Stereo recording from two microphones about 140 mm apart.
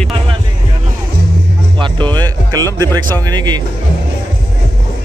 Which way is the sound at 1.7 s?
35° right (ahead or behind).